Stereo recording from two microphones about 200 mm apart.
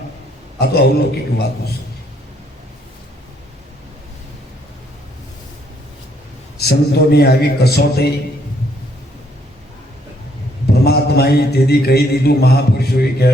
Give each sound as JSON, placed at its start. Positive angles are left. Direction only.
{"t": 0.6, "sound": "mantra", "side_deg": 55}
{"t": 6.6, "sound": "mantra", "side_deg": 55}
{"t": 10.8, "sound": "mantra", "side_deg": 50}